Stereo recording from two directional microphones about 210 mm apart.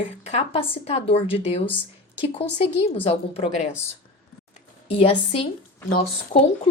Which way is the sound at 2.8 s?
30° left (ahead or behind).